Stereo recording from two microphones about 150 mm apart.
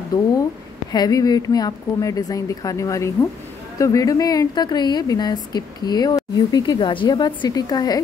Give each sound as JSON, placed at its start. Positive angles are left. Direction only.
{"t": 0.9, "sound": "speech", "side_deg": 25}